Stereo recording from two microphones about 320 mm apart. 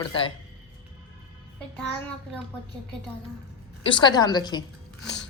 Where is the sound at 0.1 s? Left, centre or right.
Centre.